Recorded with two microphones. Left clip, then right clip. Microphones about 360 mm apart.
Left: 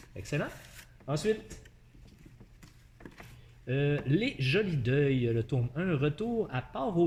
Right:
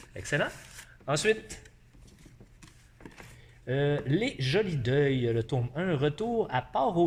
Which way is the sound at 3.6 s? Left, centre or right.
Centre.